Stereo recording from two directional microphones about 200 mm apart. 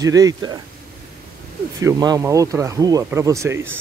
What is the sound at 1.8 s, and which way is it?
Speech, 15° right (ahead or behind).